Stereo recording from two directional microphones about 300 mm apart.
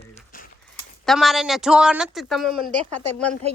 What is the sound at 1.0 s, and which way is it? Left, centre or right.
Speech, centre.